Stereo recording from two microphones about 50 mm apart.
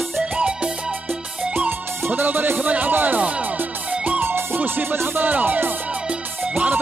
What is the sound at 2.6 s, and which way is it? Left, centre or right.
Speech, right.